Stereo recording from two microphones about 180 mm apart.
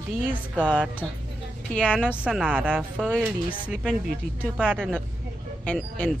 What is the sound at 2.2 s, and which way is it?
A woman's voice, 5° right (ahead or behind).